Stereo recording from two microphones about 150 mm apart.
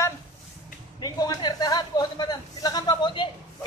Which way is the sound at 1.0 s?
25° left (ahead or behind).